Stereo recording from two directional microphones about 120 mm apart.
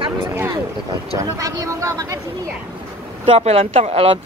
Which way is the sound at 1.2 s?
30° right (ahead or behind).